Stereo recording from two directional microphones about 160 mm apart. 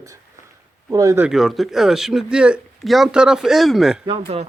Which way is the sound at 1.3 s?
Centre (ahead or behind).